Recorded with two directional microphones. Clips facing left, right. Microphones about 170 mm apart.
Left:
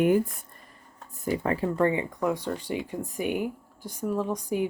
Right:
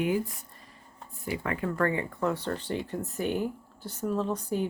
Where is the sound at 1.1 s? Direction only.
40° left (ahead or behind).